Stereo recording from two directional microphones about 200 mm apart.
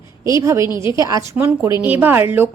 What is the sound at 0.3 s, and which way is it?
A woman's voice, 15° right (ahead or behind).